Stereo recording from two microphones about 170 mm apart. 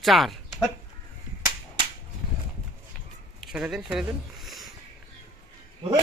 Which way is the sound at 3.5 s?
5° right (ahead or behind).